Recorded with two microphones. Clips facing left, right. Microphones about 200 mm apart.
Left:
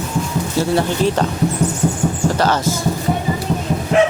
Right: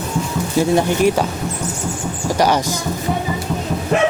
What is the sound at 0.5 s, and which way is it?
Speech, 15° right (ahead or behind).